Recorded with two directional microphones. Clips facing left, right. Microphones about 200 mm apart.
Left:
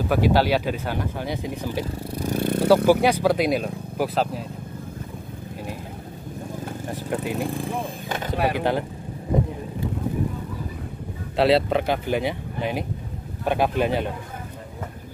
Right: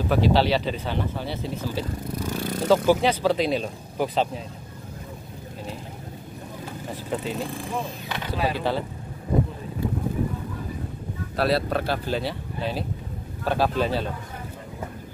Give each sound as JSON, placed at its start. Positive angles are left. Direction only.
{"t": 0.1, "sound": "speech", "side_deg": 10}
{"t": 2.3, "sound": "vehicle", "side_deg": 60}
{"t": 2.9, "sound": "speech", "side_deg": 10}
{"t": 7.1, "sound": "speech", "side_deg": 15}
{"t": 7.8, "sound": "speech", "side_deg": 50}
{"t": 8.5, "sound": "speech", "side_deg": 15}
{"t": 11.3, "sound": "speech", "side_deg": 25}